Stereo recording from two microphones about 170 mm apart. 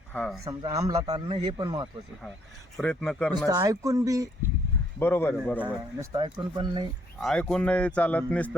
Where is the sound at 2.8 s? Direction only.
5° left (ahead or behind).